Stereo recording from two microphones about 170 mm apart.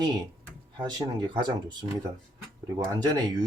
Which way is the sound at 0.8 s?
25° right (ahead or behind).